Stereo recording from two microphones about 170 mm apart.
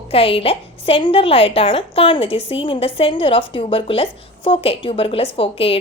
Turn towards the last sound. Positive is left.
turn(degrees=35)  # may be behind; listen again after turning